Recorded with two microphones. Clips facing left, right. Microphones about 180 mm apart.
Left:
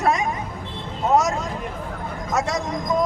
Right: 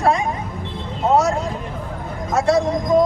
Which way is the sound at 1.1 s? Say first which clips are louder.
Right 2 dB; 30° right (ahead or behind).